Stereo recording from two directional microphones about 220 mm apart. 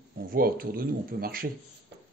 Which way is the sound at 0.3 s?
40° right (ahead or behind).